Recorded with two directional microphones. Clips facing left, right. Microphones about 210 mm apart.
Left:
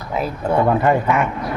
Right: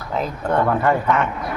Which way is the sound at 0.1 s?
10° left (ahead or behind).